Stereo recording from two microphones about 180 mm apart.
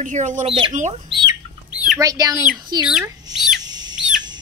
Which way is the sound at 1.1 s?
25° right (ahead or behind).